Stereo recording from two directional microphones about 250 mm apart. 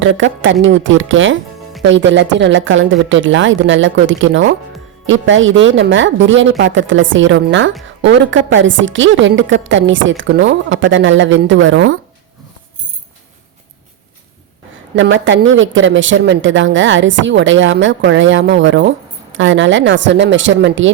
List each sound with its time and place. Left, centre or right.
0.0 s speech: right
14.9 s speech: right